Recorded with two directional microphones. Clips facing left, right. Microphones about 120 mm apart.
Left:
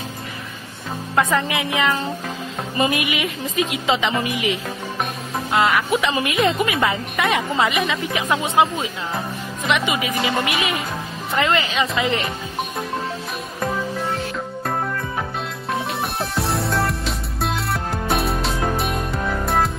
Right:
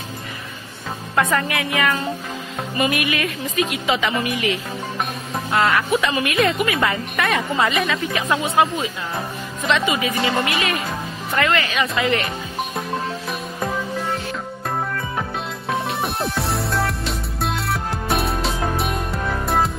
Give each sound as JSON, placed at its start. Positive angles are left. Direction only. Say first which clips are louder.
{"t": 1.1, "sound": "speech", "louder": "left 1 dB", "side_deg": 20}
{"t": 15.7, "sound": "music", "louder": "right 1 dB", "side_deg": 0}